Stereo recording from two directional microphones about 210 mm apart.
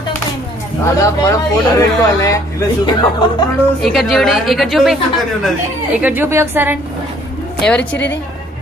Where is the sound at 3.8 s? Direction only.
Centre (ahead or behind).